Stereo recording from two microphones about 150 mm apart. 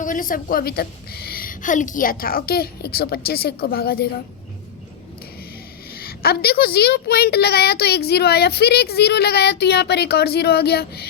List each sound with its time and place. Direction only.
0.0 s a woman's voice: 65° left (ahead or behind); by 4.1 s 90° left
5.9 s a woman's voice: 90° left